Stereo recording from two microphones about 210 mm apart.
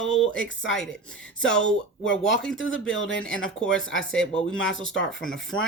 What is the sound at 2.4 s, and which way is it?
Speech, centre (ahead or behind).